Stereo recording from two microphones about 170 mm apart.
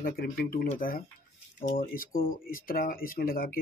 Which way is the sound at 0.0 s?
60° left (ahead or behind).